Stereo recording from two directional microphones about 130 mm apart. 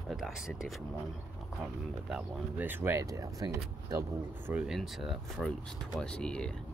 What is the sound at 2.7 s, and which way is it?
Speech, 20° right (ahead or behind).